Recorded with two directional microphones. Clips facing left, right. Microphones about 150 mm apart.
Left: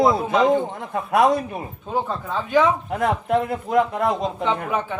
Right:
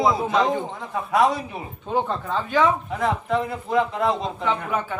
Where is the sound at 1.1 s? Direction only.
55° left (ahead or behind).